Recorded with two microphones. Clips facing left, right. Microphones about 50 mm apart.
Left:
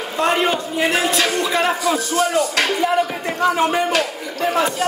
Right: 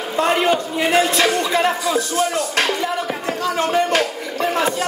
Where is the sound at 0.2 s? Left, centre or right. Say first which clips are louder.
Right 1 dB; centre.